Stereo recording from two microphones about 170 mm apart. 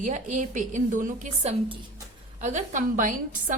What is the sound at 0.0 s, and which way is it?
A woman's voice, 45° right (ahead or behind).